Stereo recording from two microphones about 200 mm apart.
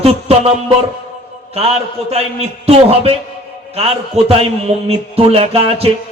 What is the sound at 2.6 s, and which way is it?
Speech, 30° right (ahead or behind).